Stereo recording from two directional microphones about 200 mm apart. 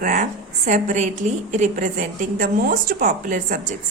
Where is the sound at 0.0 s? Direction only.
40° right (ahead or behind).